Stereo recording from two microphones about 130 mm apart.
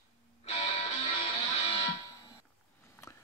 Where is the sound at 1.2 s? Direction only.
50° left (ahead or behind).